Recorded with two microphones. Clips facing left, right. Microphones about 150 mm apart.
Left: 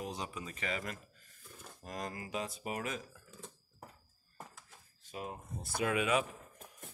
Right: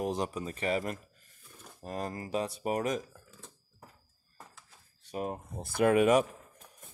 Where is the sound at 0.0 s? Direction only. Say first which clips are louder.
Right 9 dB; 50° right (ahead or behind).